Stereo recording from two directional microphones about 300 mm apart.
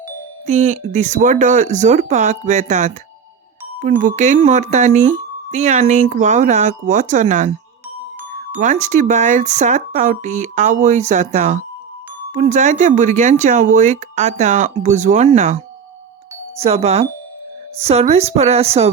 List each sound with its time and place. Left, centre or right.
0.4 s speech: right
4.0 s speech: right
8.6 s speech: right